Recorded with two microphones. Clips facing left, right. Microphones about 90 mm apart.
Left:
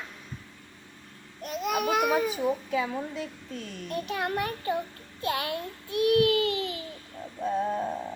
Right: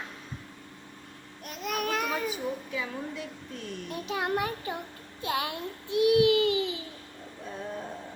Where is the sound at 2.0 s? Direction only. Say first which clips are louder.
Left 6 dB; 15° left (ahead or behind).